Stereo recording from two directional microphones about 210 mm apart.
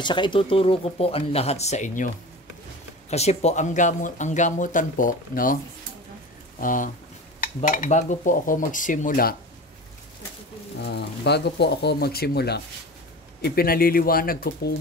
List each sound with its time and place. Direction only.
0.0 s speech: 20° left (ahead or behind)
3.1 s speech: 30° left (ahead or behind)
6.6 s speech: 40° left (ahead or behind)
10.8 s speech: 50° left (ahead or behind)